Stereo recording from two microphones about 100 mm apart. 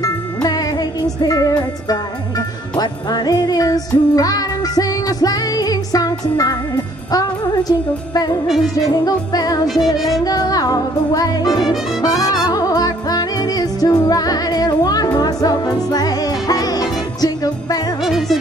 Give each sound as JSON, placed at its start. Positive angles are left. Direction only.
{"t": 0.0, "sound": "music", "side_deg": 40}
{"t": 8.5, "sound": "speech", "side_deg": 0}
{"t": 8.8, "sound": "music", "side_deg": 40}
{"t": 9.9, "sound": "speech", "side_deg": 0}
{"t": 10.2, "sound": "music", "side_deg": 40}
{"t": 18.0, "sound": "music", "side_deg": 0}